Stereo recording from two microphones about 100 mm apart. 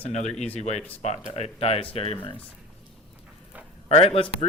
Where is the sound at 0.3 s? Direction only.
15° left (ahead or behind).